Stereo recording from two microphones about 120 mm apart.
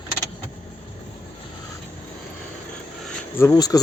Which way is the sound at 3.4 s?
30° left (ahead or behind).